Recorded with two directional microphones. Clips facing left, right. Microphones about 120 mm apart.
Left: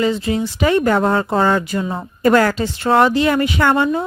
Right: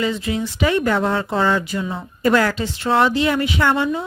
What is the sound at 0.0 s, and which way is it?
A woman's voice, 35° left (ahead or behind).